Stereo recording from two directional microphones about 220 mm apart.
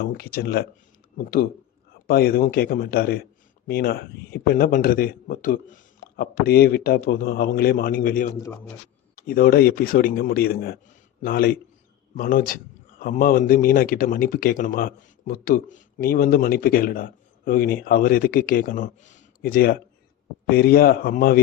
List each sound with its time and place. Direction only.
0.0 s speech: 40° left (ahead or behind)